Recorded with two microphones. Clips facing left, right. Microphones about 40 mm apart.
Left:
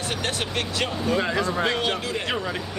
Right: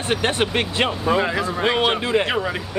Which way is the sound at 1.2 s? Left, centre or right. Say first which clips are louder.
Right 2 dB; centre.